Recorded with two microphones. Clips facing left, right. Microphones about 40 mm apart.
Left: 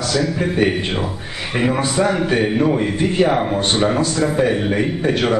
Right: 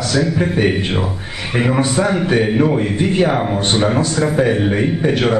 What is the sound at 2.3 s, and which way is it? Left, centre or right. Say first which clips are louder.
A man's voice: right 2 dB; centre.